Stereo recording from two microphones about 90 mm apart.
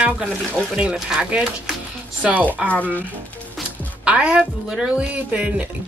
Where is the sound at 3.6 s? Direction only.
10° right (ahead or behind).